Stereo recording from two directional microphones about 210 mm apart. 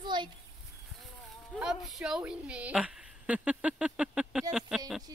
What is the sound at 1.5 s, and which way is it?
Speech, centre (ahead or behind).